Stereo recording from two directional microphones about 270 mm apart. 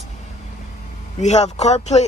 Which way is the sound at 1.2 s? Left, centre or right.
Left.